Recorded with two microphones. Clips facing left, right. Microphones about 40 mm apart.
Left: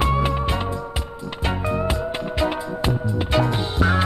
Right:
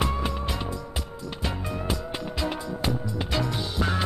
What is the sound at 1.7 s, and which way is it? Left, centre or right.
Music, left.